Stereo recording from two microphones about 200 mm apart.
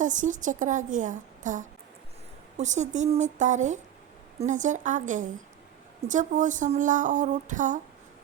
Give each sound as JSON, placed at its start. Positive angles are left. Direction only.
{"t": 0.0, "sound": "speech", "side_deg": -40}